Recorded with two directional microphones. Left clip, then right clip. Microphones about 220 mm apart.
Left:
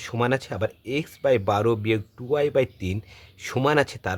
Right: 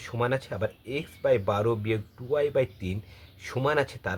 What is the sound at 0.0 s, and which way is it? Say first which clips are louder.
Speech: left 4 dB; 40° left (ahead or behind).